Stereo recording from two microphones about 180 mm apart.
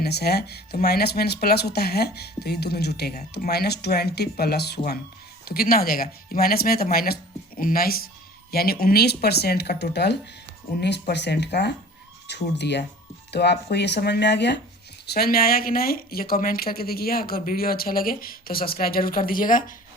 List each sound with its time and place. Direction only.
0.0 s speech: 65° left (ahead or behind)
15.0 s speech: 60° left (ahead or behind)